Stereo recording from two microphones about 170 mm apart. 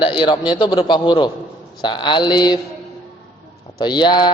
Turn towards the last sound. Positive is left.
turn(degrees=25)  # may be behind; listen again after turning